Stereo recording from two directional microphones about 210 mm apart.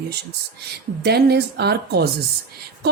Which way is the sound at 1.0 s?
50° right (ahead or behind).